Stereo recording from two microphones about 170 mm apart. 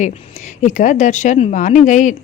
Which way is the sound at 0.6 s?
45° left (ahead or behind).